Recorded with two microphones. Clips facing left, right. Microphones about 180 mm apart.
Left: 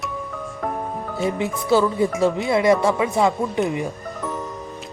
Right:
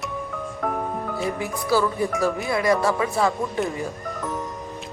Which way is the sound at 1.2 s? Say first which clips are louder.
Left 6 dB; 20° left (ahead or behind).